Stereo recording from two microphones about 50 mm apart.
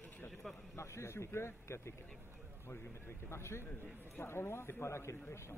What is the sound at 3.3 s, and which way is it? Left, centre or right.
A man's voice, left.